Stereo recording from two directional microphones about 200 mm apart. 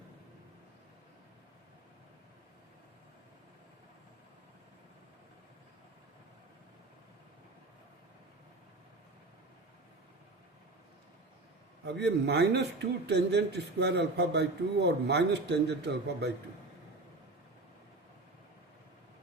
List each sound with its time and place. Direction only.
11.9 s speech: 55° right (ahead or behind)